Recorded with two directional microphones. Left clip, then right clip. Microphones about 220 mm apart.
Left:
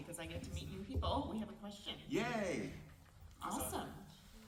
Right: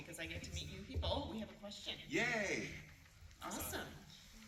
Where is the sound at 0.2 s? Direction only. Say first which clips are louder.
Right 4 dB; 50° left (ahead or behind).